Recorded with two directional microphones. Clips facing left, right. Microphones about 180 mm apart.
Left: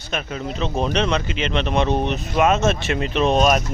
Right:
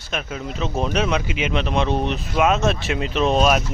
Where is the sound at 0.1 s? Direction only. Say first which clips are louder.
Left 1 dB; centre (ahead or behind).